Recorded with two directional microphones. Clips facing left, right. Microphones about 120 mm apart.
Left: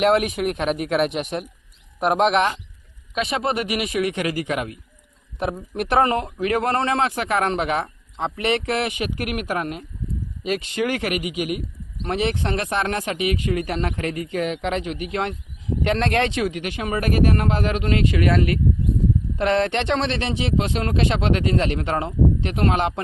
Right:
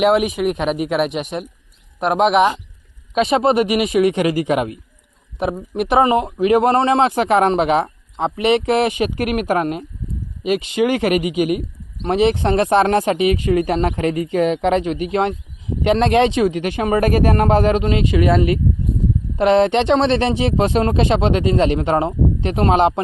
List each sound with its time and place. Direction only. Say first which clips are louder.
0.0 s speech: right 3 dB; 5° right (ahead or behind)
3.2 s speech: right 8 dB; 25° right (ahead or behind)
5.4 s speech: right 5 dB; 5° right (ahead or behind)
6.2 s speech: right 8 dB; 25° right (ahead or behind)
10.4 s speech: right 6 dB; 15° right (ahead or behind)
11.1 s speech: right 8 dB; 30° right (ahead or behind)
12.4 s speech: right 9 dB; 30° right (ahead or behind)
17.8 s speech: right 4 dB; 20° right (ahead or behind)